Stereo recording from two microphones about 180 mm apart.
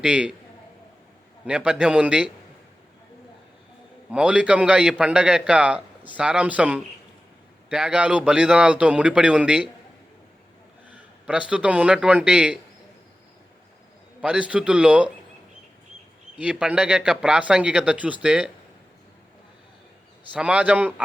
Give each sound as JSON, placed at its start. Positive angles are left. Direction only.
{"t": 0.0, "sound": "a man's voice", "side_deg": -5}
{"t": 1.5, "sound": "a man's voice", "side_deg": -5}
{"t": 4.1, "sound": "a man's voice", "side_deg": -5}
{"t": 10.8, "sound": "speech", "side_deg": -5}
{"t": 14.2, "sound": "a man's voice", "side_deg": -5}
{"t": 16.4, "sound": "a man's voice", "side_deg": -5}
{"t": 20.3, "sound": "a man's voice", "side_deg": -5}